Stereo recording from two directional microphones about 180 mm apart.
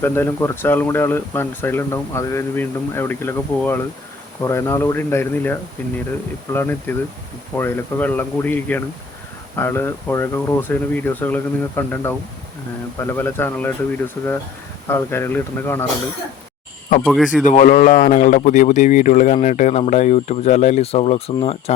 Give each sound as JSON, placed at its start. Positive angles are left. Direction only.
{"t": 0.0, "sound": "speech", "side_deg": 15}
{"t": 17.0, "sound": "speech", "side_deg": 0}
{"t": 17.4, "sound": "a man's voice", "side_deg": 45}